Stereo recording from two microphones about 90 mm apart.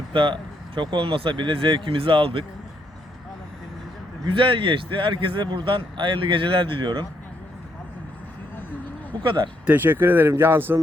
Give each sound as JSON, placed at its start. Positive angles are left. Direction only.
{"t": 0.1, "sound": "a man's voice", "side_deg": -70}
{"t": 4.3, "sound": "a man's voice", "side_deg": -75}
{"t": 9.2, "sound": "speech", "side_deg": -60}
{"t": 9.6, "sound": "speech", "side_deg": -20}